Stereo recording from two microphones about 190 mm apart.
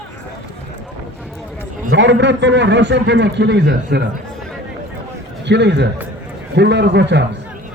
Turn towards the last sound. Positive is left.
turn(degrees=-65)  # may be behind; listen again after turning